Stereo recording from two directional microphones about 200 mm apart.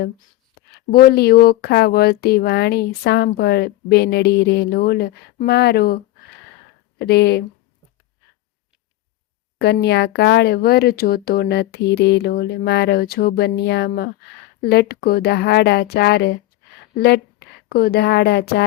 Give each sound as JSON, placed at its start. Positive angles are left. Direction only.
{"t": 0.7, "sound": "speech", "side_deg": 50}
{"t": 7.0, "sound": "speech", "side_deg": 55}
{"t": 9.6, "sound": "speech", "side_deg": 55}
{"t": 17.7, "sound": "speech", "side_deg": 50}